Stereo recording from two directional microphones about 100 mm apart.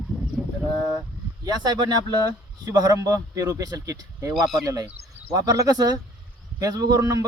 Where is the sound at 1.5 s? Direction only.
45° right (ahead or behind).